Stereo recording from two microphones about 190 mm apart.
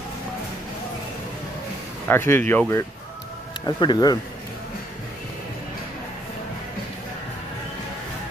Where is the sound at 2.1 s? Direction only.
10° left (ahead or behind).